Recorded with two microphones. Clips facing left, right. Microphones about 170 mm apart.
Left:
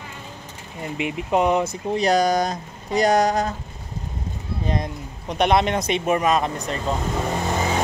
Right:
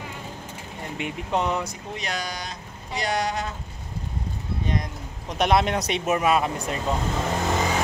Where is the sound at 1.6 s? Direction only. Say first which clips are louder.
Left 10 dB; 35° left (ahead or behind).